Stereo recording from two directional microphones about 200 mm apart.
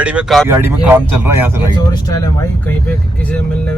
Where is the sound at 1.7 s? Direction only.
20° left (ahead or behind).